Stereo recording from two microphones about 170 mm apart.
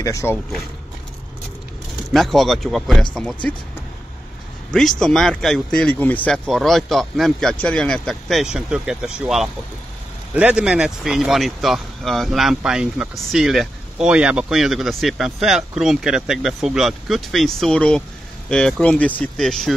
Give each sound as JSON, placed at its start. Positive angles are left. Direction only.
{"t": 0.0, "sound": "speech", "side_deg": 15}
{"t": 2.1, "sound": "speech", "side_deg": 0}
{"t": 4.7, "sound": "speech", "side_deg": 5}